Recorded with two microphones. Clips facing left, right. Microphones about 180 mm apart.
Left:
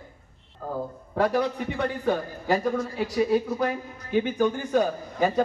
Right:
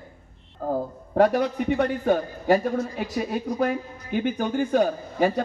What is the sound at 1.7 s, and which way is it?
Speech, 45° right (ahead or behind).